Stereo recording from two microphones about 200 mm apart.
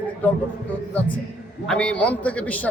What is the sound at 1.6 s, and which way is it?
A man's voice, 5° left (ahead or behind).